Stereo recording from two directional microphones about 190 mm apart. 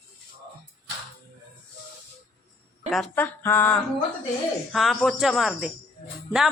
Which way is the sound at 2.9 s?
5° left (ahead or behind).